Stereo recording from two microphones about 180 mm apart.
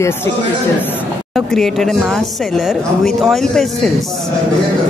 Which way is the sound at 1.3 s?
Centre (ahead or behind).